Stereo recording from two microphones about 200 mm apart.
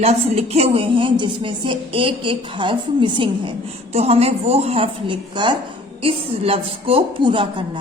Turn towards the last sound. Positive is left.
turn(degrees=-25)  # may be behind; listen again after turning